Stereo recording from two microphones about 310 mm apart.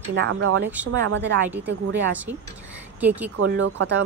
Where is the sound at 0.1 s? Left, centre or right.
Right.